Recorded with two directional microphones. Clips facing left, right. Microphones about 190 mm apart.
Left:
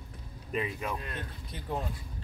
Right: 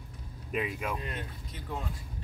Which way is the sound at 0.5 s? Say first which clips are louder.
Even; 5° right (ahead or behind).